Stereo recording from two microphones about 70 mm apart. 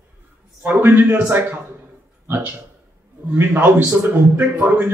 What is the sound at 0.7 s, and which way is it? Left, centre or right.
A man's voice, right.